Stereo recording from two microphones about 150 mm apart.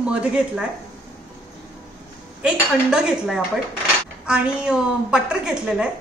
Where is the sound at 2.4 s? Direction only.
5° right (ahead or behind).